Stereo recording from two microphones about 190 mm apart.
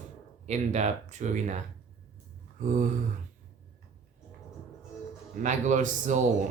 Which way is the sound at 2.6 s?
40° right (ahead or behind).